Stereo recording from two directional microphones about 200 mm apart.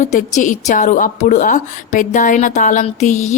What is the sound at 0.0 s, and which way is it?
Speech, 35° left (ahead or behind).